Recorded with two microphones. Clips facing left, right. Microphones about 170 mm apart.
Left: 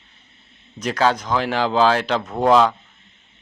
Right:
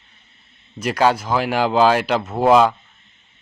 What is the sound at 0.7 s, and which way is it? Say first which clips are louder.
A man's voice: right 2 dB; 10° right (ahead or behind).